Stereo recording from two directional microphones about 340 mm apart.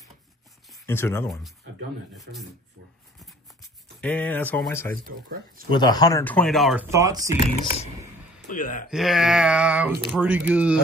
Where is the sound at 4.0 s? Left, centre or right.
Centre.